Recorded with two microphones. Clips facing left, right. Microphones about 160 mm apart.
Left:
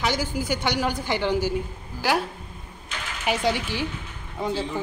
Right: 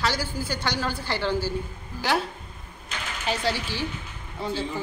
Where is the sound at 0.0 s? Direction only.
15° left (ahead or behind).